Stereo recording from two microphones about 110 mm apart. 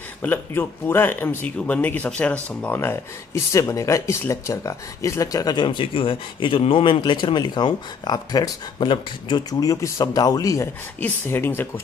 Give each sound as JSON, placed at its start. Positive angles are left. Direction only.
{"t": 0.2, "sound": "speech", "side_deg": 20}
{"t": 11.0, "sound": "speech", "side_deg": 20}